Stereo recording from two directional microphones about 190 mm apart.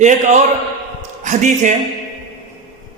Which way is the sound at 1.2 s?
40° right (ahead or behind).